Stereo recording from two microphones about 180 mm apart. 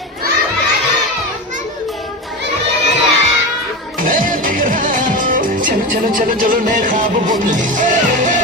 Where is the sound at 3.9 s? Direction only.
50° right (ahead or behind).